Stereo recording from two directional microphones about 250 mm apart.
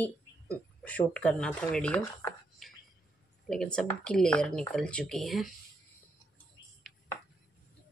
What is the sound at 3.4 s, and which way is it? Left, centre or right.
Speech, centre.